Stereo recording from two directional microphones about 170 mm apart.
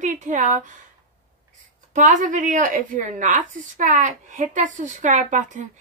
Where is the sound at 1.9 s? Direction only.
50° right (ahead or behind).